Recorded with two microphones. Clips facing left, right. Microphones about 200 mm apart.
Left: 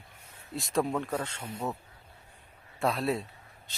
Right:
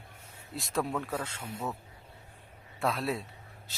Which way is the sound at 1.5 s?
25° left (ahead or behind).